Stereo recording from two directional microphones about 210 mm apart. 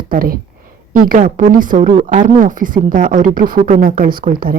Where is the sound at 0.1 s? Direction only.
45° right (ahead or behind).